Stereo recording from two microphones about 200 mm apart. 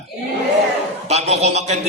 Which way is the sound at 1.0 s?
35° right (ahead or behind).